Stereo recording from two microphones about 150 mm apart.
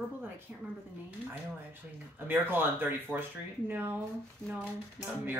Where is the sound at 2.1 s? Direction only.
15° right (ahead or behind).